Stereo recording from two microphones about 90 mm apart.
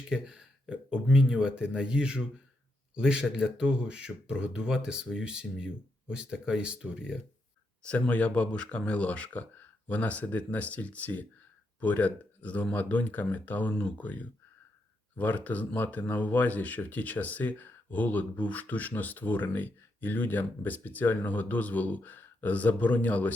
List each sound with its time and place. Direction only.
0.1 s speech: 10° right (ahead or behind)
7.9 s speech: 15° left (ahead or behind)